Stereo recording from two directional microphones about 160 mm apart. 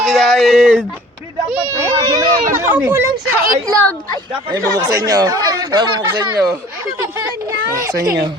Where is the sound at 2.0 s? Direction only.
20° right (ahead or behind).